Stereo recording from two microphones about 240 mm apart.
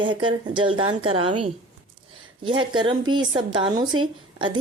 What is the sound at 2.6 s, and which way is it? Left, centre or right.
A woman's voice, centre.